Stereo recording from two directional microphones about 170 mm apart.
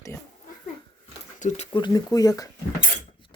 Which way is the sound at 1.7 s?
25° left (ahead or behind).